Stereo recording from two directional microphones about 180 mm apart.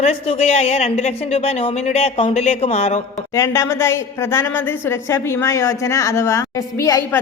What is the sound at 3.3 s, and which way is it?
A woman's voice, 15° left (ahead or behind).